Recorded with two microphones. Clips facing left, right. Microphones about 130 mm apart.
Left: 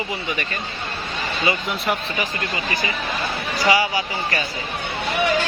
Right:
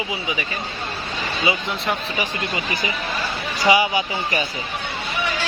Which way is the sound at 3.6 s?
15° right (ahead or behind).